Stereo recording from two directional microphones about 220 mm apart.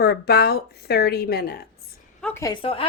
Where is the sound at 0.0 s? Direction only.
45° left (ahead or behind).